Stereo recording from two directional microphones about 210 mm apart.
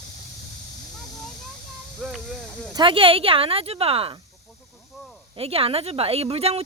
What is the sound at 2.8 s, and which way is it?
Speech, 25° right (ahead or behind).